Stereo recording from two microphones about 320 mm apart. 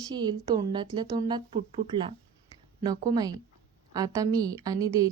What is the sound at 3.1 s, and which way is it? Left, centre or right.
Speech, centre.